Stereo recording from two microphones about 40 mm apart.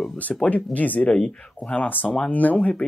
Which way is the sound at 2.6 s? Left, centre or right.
Left.